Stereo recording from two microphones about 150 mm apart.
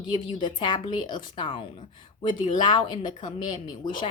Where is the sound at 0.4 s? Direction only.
30° left (ahead or behind).